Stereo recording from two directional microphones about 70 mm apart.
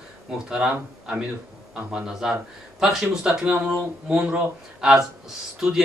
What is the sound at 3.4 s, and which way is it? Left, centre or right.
Speech, centre.